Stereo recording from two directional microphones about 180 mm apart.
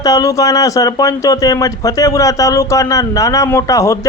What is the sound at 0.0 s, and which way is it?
Speech, 20° left (ahead or behind).